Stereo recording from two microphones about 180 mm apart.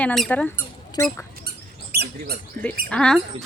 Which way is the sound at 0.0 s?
5° left (ahead or behind).